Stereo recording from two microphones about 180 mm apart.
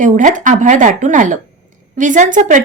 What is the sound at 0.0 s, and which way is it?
Speech, 45° right (ahead or behind).